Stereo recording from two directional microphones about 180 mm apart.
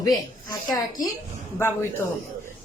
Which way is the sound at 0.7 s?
20° left (ahead or behind).